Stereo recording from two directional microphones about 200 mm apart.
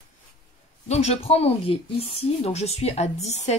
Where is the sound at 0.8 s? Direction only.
35° left (ahead or behind).